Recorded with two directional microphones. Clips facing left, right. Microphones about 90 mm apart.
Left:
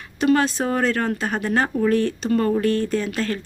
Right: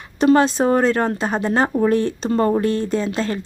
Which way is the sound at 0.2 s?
30° right (ahead or behind).